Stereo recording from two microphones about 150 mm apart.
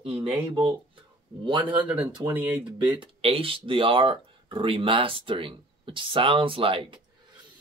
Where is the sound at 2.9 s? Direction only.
40° right (ahead or behind).